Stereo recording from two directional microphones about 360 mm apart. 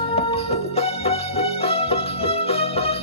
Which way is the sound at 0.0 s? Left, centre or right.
Centre.